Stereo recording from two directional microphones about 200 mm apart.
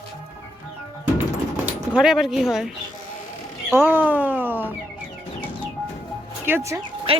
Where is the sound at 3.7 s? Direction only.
10° right (ahead or behind).